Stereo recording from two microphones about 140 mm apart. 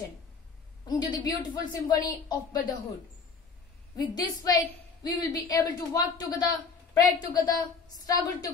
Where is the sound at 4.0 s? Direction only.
30° left (ahead or behind).